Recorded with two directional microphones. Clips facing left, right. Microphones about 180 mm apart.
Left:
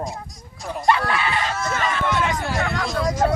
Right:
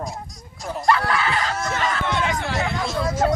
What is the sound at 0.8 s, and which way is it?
Speech, 20° left (ahead or behind).